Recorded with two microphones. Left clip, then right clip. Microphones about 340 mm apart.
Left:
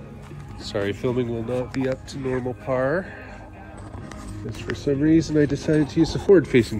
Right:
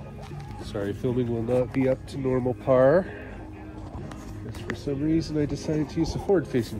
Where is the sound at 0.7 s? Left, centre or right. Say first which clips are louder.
Left 5 dB; left.